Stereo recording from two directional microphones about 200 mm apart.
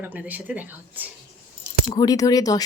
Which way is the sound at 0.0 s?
10° right (ahead or behind).